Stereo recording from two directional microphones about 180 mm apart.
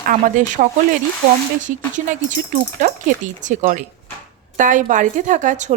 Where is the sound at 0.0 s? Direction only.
45° right (ahead or behind).